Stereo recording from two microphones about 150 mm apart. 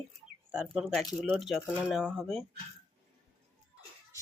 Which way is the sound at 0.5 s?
5° right (ahead or behind).